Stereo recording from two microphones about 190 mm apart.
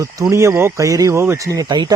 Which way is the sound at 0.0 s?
15° right (ahead or behind).